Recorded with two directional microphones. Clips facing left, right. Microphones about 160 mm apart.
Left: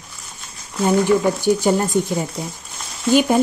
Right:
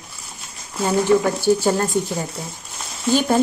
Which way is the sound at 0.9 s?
15° left (ahead or behind).